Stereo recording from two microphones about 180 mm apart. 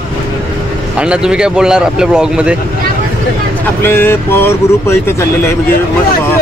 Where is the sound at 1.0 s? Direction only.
5° right (ahead or behind).